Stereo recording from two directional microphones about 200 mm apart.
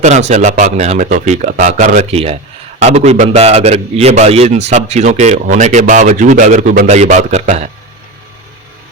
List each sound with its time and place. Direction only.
0.0 s speech: 35° right (ahead or behind)